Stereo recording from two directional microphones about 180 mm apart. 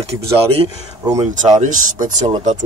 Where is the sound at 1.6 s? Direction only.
45° right (ahead or behind).